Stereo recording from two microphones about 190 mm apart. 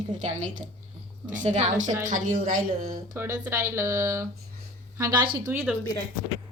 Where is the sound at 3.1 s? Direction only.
15° right (ahead or behind).